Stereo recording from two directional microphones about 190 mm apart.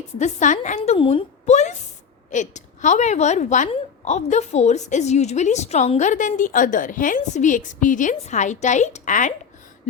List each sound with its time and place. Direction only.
0.2 s a woman's voice: 40° left (ahead or behind)